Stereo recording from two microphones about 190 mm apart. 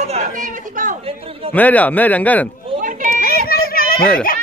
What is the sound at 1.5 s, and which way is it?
Speech, 10° left (ahead or behind).